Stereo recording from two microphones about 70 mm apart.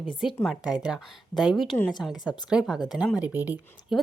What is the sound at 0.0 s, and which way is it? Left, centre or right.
Speech, centre.